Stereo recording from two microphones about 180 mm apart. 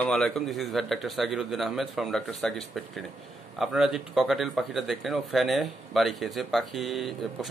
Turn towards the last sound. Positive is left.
turn(degrees=0)  # may be behind; listen again after turning